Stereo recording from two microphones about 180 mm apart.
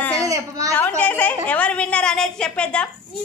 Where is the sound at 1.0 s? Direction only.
10° left (ahead or behind).